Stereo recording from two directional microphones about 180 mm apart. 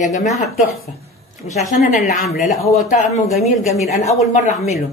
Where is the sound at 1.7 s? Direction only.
45° left (ahead or behind).